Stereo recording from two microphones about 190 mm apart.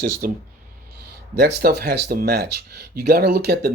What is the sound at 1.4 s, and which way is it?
Speech, 55° right (ahead or behind).